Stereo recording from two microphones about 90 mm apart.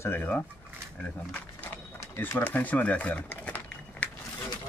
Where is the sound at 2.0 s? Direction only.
25° left (ahead or behind).